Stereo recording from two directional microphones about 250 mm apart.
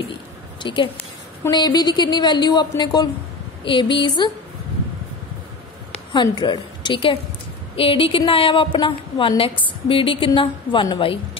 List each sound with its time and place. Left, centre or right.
0.6 s a woman's voice: centre
6.1 s a woman's voice: centre